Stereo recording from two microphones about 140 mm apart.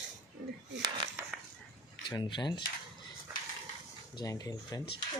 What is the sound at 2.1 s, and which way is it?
Speech, 35° left (ahead or behind).